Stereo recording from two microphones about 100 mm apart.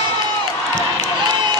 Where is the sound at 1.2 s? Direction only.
50° right (ahead or behind).